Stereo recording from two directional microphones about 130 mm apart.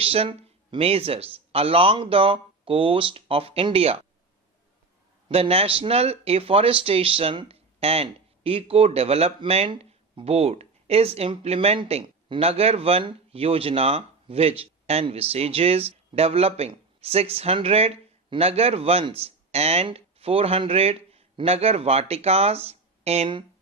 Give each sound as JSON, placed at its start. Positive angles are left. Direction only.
{"t": 0.0, "sound": "speech", "side_deg": -45}
{"t": 5.3, "sound": "speech", "side_deg": -50}